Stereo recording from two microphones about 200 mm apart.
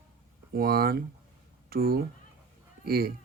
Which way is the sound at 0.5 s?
50° right (ahead or behind).